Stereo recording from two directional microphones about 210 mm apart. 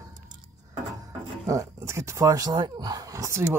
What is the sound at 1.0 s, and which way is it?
Music, 15° right (ahead or behind).